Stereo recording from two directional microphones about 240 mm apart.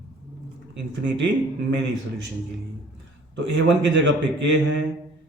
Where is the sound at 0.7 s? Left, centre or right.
Right.